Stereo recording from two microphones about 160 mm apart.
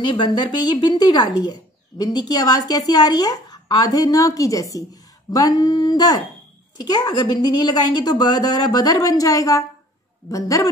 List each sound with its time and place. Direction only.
0.0 s speech: 30° left (ahead or behind)